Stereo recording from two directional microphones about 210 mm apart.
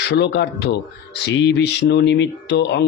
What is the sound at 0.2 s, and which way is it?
Speech, 55° left (ahead or behind).